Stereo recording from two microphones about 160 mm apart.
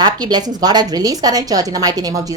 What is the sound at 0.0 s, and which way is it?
A woman's voice, 25° right (ahead or behind).